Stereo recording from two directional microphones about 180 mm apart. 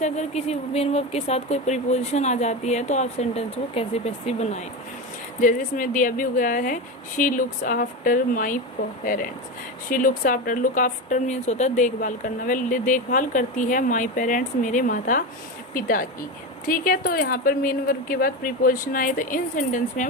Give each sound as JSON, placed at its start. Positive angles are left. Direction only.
{"t": 0.0, "sound": "speech", "side_deg": 40}